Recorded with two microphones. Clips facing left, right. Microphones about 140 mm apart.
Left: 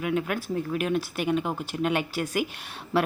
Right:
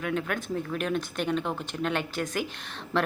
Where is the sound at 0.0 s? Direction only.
10° left (ahead or behind).